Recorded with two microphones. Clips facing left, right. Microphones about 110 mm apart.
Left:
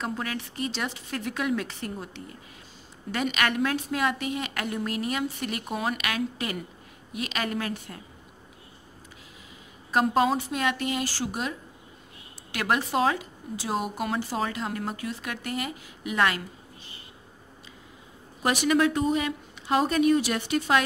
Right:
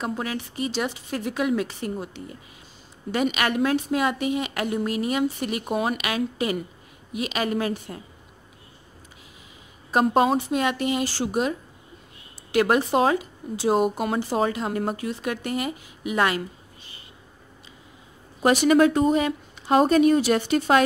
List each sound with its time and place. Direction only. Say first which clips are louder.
0.0 s a woman's voice: right 3 dB; 10° right (ahead or behind)
9.9 s a woman's voice: right 3 dB; 25° right (ahead or behind)
12.5 s a woman's voice: right 6 dB; 25° right (ahead or behind)
18.4 s speech: right 6 dB; 30° right (ahead or behind)
18.8 s speech: right 5 dB; 40° right (ahead or behind)